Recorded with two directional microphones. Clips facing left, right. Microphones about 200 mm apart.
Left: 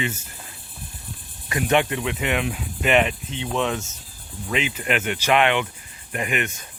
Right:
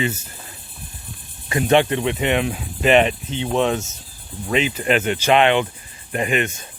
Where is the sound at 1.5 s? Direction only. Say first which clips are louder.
Right 4 dB; 30° right (ahead or behind).